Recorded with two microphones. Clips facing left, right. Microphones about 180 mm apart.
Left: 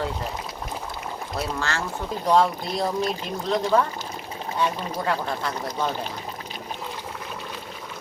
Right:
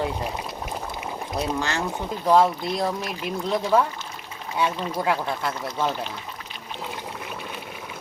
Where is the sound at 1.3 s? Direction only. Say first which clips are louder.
Right 2 dB; 15° right (ahead or behind).